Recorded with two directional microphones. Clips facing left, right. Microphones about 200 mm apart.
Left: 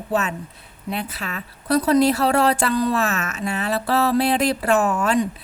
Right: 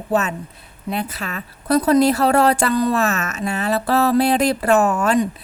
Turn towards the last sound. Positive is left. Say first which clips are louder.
# right 3 dB
turn(degrees=-45)  # may be behind; listen again after turning